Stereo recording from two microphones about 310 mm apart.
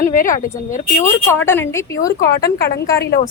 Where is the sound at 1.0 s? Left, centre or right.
Centre.